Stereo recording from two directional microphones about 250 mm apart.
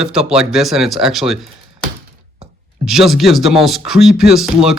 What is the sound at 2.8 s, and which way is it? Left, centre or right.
Speech, centre.